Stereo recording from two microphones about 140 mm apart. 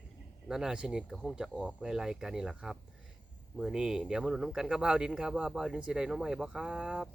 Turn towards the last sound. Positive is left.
turn(degrees=-5)  # may be behind; listen again after turning